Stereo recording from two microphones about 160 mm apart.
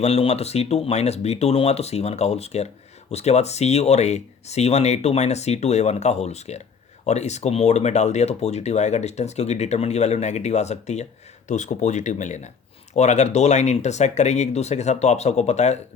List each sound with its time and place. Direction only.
0.0 s speech: 40° left (ahead or behind)